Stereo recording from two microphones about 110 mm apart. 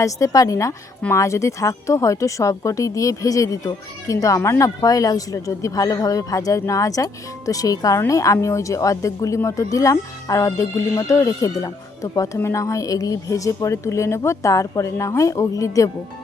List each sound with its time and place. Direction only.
0.0 s speech: 30° left (ahead or behind)